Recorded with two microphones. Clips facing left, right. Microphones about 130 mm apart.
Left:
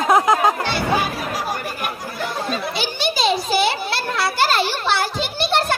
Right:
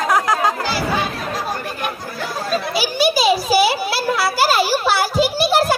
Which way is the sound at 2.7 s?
5° right (ahead or behind).